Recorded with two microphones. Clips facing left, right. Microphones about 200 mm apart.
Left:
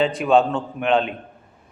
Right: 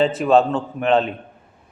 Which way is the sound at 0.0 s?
5° right (ahead or behind).